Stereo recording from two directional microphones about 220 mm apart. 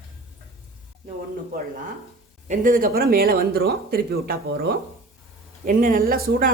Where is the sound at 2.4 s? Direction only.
35° right (ahead or behind).